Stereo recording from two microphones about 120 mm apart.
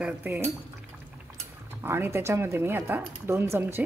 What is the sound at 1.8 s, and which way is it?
Speech, 20° right (ahead or behind).